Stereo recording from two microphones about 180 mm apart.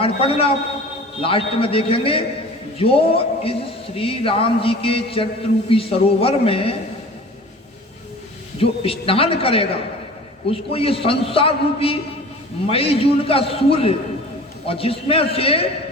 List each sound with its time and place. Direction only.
0.0 s speech: 30° left (ahead or behind)
8.5 s speech: 30° left (ahead or behind)